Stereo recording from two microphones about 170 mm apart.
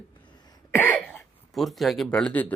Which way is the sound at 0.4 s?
20° left (ahead or behind).